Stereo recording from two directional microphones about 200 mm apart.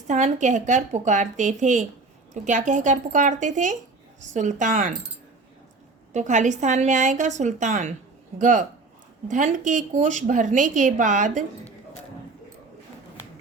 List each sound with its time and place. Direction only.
0.1 s a woman's voice: 35° right (ahead or behind)
6.1 s a woman's voice: 35° right (ahead or behind)